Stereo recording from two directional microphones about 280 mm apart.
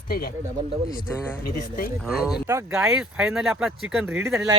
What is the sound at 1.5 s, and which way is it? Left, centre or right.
Speech, left.